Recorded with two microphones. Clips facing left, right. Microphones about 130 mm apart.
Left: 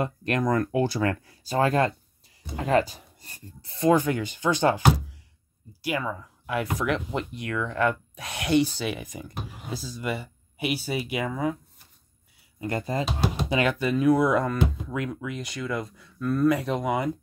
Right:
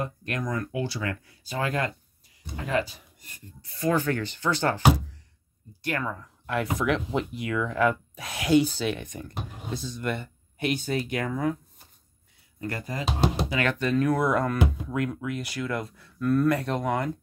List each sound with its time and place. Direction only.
0.0 s speech: 70° left (ahead or behind); by 3.9 s 30° left (ahead or behind)
3.9 s speech: 15° left (ahead or behind)
12.5 s speech: 20° left (ahead or behind)
13.5 s speech: 15° left (ahead or behind)